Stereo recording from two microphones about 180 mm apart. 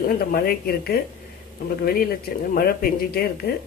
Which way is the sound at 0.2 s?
55° left (ahead or behind).